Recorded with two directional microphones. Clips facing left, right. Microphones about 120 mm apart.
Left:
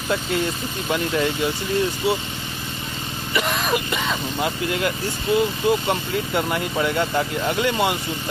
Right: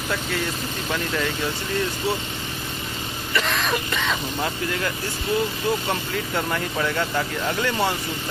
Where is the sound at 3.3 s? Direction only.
15° left (ahead or behind).